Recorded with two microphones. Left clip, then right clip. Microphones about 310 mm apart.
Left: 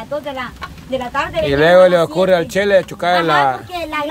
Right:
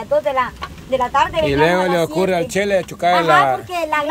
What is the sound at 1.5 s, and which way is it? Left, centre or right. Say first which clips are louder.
Speech: left 6 dB; centre.